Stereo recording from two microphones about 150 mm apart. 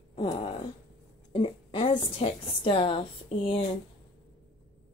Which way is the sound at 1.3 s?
40° left (ahead or behind).